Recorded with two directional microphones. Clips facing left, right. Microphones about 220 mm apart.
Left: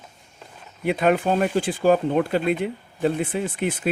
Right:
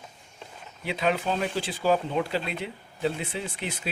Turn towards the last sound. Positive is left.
turn(degrees=50)  # may be behind; listen again after turning